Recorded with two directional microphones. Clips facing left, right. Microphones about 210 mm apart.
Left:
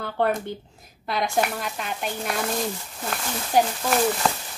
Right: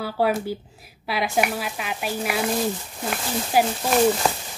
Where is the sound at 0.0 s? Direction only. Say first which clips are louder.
Right 2 dB; 5° right (ahead or behind).